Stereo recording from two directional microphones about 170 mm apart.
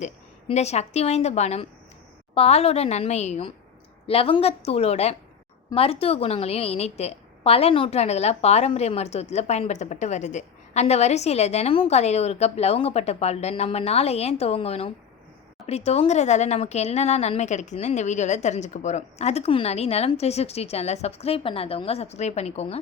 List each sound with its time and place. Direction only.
0.0 s a woman's voice: 40° left (ahead or behind)